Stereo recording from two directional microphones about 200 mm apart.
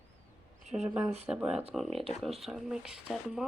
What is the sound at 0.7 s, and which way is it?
Speech, 35° right (ahead or behind).